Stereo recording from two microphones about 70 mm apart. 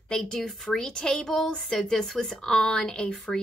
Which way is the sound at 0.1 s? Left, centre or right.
Centre.